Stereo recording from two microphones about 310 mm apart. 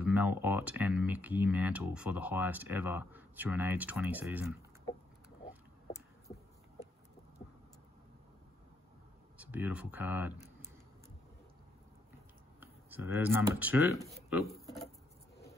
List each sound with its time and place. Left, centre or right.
0.0 s speech: centre
9.4 s speech: centre
10.3 s a sound: left
12.5 s speech: centre